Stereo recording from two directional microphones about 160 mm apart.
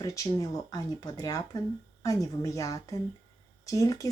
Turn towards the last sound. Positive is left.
turn(degrees=20)  # may be behind; listen again after turning